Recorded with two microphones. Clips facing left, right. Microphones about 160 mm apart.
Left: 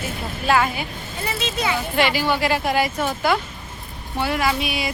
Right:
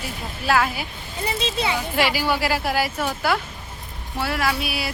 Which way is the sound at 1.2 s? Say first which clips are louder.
Even; 30° right (ahead or behind).